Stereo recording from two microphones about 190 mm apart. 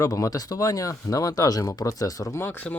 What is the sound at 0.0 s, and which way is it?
Speech, 20° left (ahead or behind).